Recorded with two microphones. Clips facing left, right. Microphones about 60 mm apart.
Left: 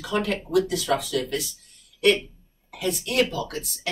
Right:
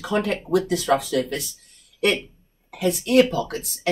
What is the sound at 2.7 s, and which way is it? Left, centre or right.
Speech, right.